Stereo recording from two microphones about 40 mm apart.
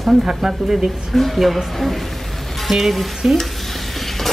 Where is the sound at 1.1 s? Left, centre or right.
Centre.